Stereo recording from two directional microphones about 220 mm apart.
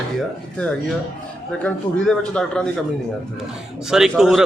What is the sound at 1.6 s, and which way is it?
Speech, 5° left (ahead or behind).